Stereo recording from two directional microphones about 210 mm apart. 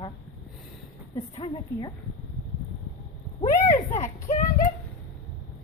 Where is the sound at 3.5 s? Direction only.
35° left (ahead or behind).